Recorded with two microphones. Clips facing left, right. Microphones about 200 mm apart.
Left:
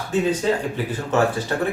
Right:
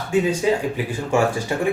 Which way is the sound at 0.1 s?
10° right (ahead or behind).